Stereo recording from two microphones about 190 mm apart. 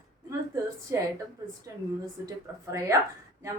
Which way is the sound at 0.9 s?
15° right (ahead or behind).